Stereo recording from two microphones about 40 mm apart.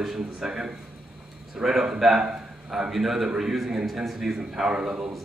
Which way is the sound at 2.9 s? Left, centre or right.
Centre.